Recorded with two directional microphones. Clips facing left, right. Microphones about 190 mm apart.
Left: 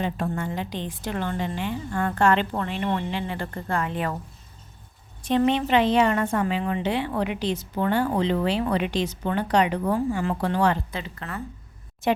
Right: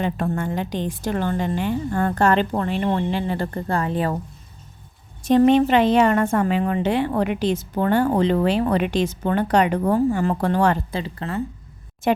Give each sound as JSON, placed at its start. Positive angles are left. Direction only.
{"t": 0.0, "sound": "a woman's voice", "side_deg": -55}
{"t": 5.2, "sound": "a woman's voice", "side_deg": -45}
{"t": 10.9, "sound": "a woman's voice", "side_deg": -30}